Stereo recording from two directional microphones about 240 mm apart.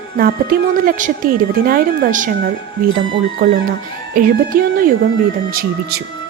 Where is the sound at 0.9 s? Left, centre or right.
Right.